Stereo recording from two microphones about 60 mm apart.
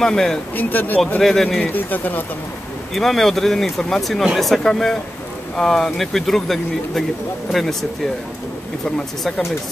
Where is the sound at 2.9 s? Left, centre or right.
Centre.